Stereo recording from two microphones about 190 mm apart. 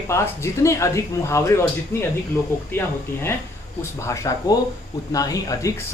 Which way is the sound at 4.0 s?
15° left (ahead or behind).